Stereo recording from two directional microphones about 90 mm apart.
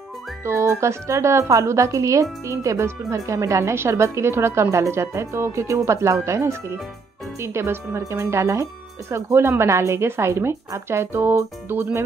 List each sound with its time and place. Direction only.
0.5 s a woman's voice: 30° right (ahead or behind)